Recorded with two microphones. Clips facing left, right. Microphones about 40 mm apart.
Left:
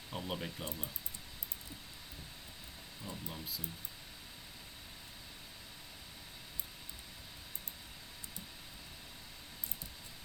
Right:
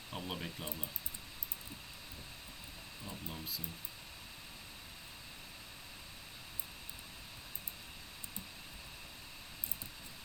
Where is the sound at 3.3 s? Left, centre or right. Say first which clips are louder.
Even; centre.